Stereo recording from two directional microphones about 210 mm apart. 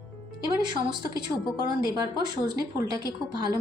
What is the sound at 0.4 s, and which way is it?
A woman's voice, 20° right (ahead or behind).